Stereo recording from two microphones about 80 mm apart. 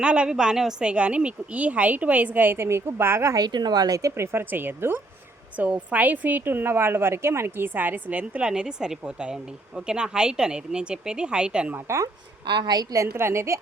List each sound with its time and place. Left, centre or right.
0.0 s a woman's voice: centre; by 3.3 s right
3.3 s speech: right
4.3 s speech: right
5.5 s a woman's voice: centre
11.9 s a woman's voice: right
12.5 s a woman's voice: right
13.0 s a woman's voice: right